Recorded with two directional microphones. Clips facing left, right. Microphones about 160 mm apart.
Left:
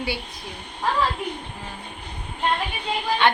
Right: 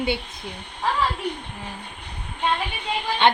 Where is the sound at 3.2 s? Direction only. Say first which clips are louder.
Right 2 dB; 20° right (ahead or behind).